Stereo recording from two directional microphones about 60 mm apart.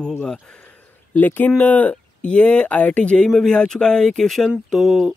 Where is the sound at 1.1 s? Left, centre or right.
Left; by 5.0 s centre.